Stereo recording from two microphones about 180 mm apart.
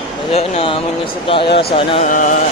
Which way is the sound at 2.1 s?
45° left (ahead or behind).